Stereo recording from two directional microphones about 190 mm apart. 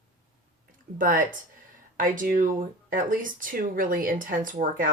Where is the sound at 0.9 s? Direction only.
45° right (ahead or behind).